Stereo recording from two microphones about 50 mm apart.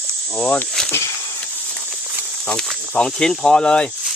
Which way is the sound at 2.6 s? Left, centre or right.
Centre.